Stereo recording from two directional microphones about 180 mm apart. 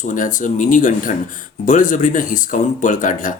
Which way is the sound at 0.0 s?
45° left (ahead or behind).